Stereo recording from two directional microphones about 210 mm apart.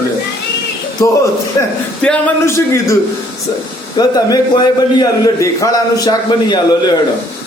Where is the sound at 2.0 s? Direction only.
10° left (ahead or behind).